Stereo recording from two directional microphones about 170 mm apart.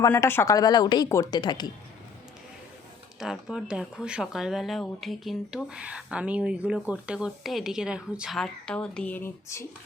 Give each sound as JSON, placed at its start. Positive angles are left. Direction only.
{"t": 0.1, "sound": "speech", "side_deg": 15}
{"t": 3.2, "sound": "speech", "side_deg": -5}